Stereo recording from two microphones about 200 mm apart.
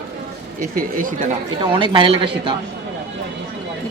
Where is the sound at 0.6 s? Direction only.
45° right (ahead or behind).